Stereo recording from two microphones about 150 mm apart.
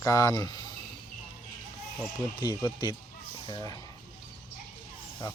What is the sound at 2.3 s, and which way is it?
Speech, 25° left (ahead or behind).